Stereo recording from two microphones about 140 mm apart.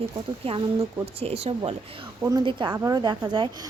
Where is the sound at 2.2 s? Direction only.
25° right (ahead or behind).